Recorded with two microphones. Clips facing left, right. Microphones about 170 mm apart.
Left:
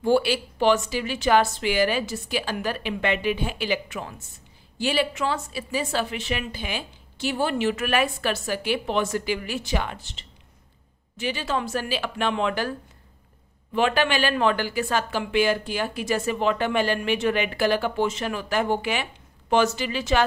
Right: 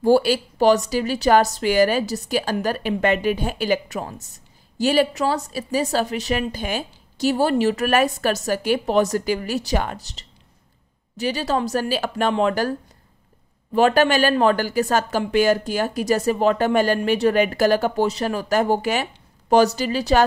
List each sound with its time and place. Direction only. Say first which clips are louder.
0.0 s a woman's voice: right 4 dB; 40° right (ahead or behind)
13.7 s a woman's voice: right 6 dB; 40° right (ahead or behind)